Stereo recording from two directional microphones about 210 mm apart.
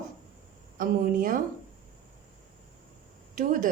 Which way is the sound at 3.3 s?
40° right (ahead or behind).